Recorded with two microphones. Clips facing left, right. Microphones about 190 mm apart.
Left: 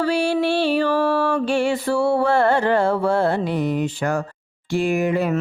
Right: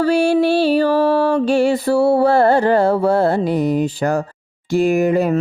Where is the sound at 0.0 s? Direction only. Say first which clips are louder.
Right 5 dB; 45° right (ahead or behind).